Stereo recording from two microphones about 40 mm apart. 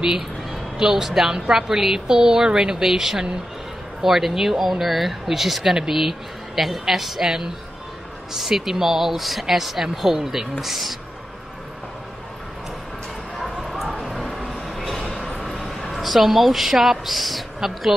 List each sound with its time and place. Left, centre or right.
0.5 s speech: centre
7.2 s speech: centre
13.4 s bow-wow: centre
15.4 s a woman's voice: centre